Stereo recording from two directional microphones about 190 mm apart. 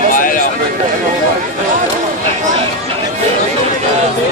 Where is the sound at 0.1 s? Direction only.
45° left (ahead or behind).